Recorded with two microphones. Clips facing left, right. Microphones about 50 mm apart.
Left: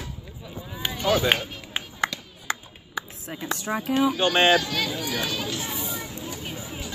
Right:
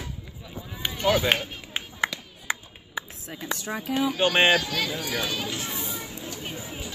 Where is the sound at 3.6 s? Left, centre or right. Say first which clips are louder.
Left 6 dB; centre.